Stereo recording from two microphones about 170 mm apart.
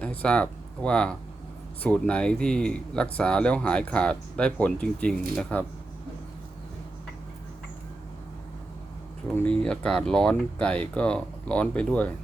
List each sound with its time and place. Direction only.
0.0 s speech: 5° left (ahead or behind)
9.3 s speech: 10° left (ahead or behind)